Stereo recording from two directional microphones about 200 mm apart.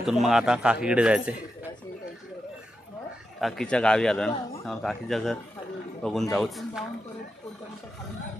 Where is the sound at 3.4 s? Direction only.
5° left (ahead or behind).